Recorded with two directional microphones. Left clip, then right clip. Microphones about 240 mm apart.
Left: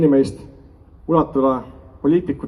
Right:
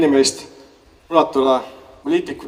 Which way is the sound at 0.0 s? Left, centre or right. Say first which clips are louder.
Right 1 dB; right.